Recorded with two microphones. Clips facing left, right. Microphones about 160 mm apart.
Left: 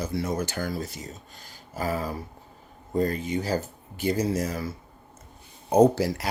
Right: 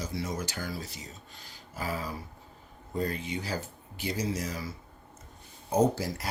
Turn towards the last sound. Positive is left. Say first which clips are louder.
# left 7 dB
turn(degrees=75)  # may be behind; listen again after turning